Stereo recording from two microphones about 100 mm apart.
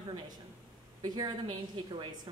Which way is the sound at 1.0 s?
40° right (ahead or behind).